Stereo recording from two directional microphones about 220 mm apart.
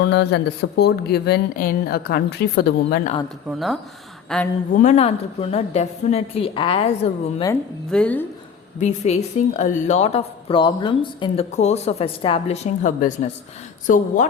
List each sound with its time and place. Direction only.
0.0 s speech: 50° left (ahead or behind)
4.3 s speech: centre (ahead or behind)
4.7 s speech: 35° left (ahead or behind)
7.4 s a woman's voice: 5° left (ahead or behind)
8.8 s speech: 30° left (ahead or behind)
12.8 s speech: 35° left (ahead or behind)